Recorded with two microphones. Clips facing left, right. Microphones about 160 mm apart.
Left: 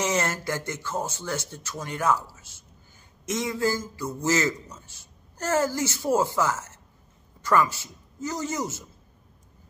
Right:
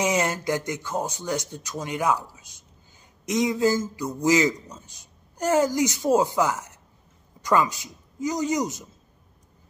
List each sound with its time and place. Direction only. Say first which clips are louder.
0.0 s a man's voice: right 3 dB; 15° right (ahead or behind)